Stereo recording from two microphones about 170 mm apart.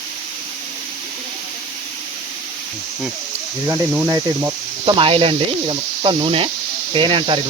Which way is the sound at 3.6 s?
10° right (ahead or behind).